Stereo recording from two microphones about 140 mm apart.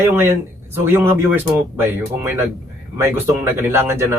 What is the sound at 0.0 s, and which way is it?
Speech, 15° right (ahead or behind).